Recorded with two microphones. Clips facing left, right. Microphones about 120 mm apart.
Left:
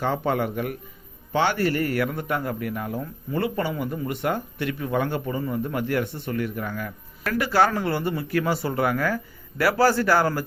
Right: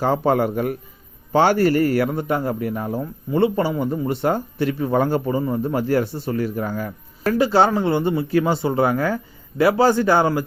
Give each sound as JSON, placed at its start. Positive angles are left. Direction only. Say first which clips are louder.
{"t": 0.0, "sound": "speech", "louder": "right 6 dB", "side_deg": -40}